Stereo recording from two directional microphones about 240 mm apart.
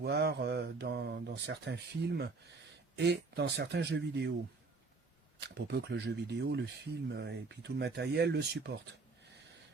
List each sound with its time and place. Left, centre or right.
0.0 s speech: right
5.4 s speech: right